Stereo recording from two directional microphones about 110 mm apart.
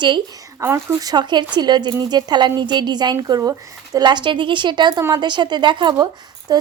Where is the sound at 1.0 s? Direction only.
40° right (ahead or behind).